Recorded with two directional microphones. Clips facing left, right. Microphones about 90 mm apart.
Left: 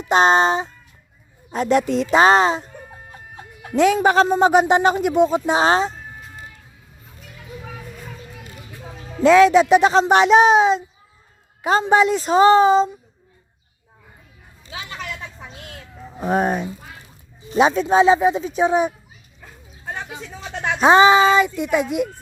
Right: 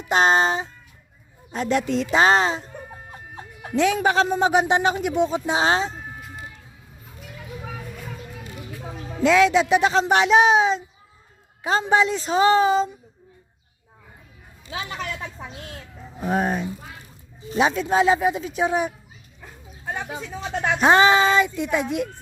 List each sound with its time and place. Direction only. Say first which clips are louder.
0.0 s speech: left 3 dB; 35° left (ahead or behind)
3.8 s speech: left 4 dB; 40° left (ahead or behind)
9.2 s speech: left 5 dB; 40° left (ahead or behind)
14.7 s speech: right 2 dB; 35° right (ahead or behind)
16.1 s speech: left 3 dB; 45° left (ahead or behind)
17.6 s speech: left 4 dB; 30° left (ahead or behind)
19.8 s a sound: right 1 dB; 10° right (ahead or behind)
20.8 s a child's voice: left 4 dB; 20° left (ahead or behind)